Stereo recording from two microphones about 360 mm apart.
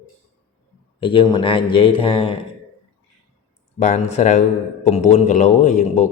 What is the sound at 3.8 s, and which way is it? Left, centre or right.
A man's voice, centre.